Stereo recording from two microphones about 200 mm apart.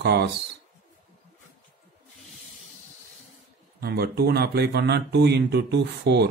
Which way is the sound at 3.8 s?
50° right (ahead or behind).